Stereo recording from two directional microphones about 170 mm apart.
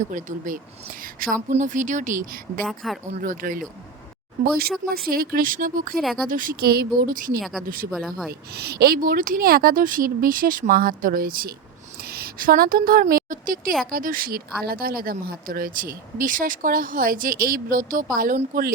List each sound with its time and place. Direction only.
0.0 s speech: 45° right (ahead or behind)
2.6 s speech: centre (ahead or behind)
3.1 s speech: 50° right (ahead or behind)
7.9 s speech: centre (ahead or behind)
8.3 s a woman's voice: 70° right (ahead or behind); by 18.3 s 55° right (ahead or behind)